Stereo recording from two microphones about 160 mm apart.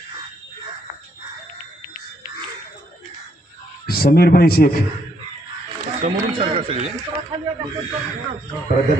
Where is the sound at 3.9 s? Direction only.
70° left (ahead or behind).